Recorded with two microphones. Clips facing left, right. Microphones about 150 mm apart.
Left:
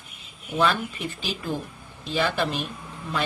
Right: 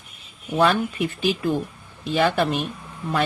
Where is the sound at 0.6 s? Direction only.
60° right (ahead or behind).